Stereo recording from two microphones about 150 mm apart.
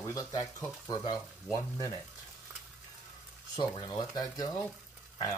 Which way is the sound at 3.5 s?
25° left (ahead or behind).